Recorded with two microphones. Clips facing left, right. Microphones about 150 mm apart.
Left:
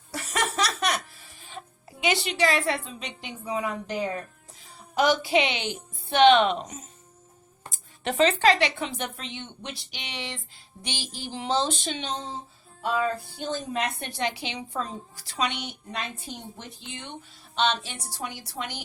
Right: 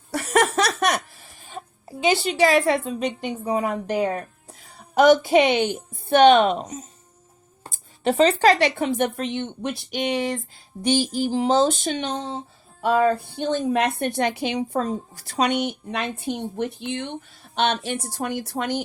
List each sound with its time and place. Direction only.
0.1 s laughter: 60° right (ahead or behind)
2.6 s a woman's voice: 45° right (ahead or behind)
15.9 s a woman's voice: 60° right (ahead or behind)